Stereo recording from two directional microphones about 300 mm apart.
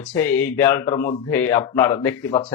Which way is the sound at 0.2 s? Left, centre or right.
Centre.